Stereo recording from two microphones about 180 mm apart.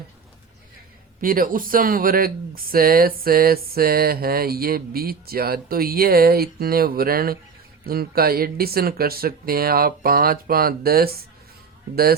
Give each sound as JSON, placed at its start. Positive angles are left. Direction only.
{"t": 1.2, "sound": "speech", "side_deg": -50}